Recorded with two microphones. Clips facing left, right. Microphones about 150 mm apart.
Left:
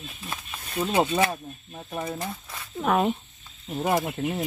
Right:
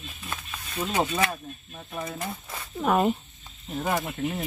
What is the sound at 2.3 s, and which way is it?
Speech, centre (ahead or behind).